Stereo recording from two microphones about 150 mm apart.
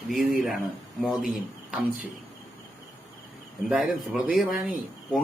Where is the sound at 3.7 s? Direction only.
5° right (ahead or behind).